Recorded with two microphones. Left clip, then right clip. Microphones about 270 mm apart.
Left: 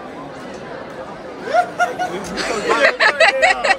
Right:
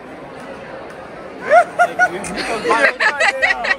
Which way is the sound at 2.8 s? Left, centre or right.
Centre.